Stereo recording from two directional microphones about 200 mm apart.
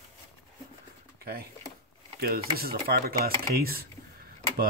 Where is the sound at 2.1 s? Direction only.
50° right (ahead or behind).